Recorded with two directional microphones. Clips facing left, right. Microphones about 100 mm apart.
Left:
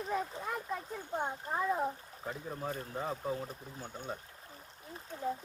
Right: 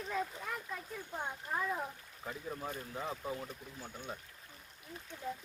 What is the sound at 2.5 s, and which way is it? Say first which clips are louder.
Speech: left 2 dB; 20° left (ahead or behind).